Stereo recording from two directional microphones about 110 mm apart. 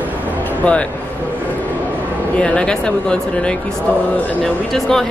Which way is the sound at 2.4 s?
10° left (ahead or behind).